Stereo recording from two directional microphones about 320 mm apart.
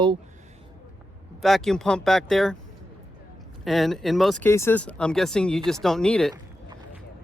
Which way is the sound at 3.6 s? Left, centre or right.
Centre.